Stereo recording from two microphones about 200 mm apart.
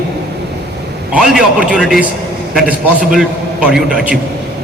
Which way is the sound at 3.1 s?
5° right (ahead or behind).